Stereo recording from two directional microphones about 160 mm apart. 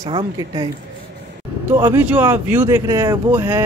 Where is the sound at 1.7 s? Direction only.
15° right (ahead or behind).